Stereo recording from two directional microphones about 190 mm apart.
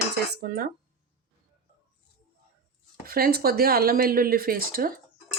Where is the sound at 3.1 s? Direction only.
50° right (ahead or behind).